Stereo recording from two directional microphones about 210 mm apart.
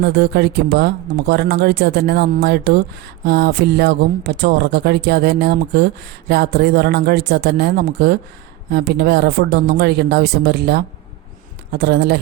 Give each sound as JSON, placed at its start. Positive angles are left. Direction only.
{"t": 0.0, "sound": "speech", "side_deg": -50}